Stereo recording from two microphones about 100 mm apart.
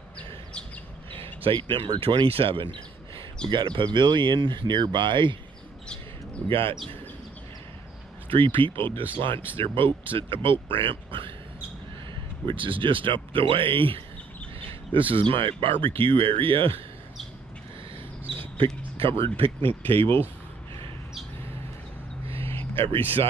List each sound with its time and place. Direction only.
1.1 s speech: 70° right (ahead or behind)
6.5 s speech: 65° right (ahead or behind)
8.3 s speech: 60° right (ahead or behind)
12.4 s speech: 60° right (ahead or behind)
18.2 s a sound: 65° right (ahead or behind)
18.9 s speech: 65° right (ahead or behind)
22.4 s a sound: 25° left (ahead or behind)
22.8 s speech: 70° right (ahead or behind)